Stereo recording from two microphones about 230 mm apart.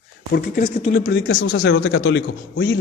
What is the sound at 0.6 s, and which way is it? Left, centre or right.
Speech, left.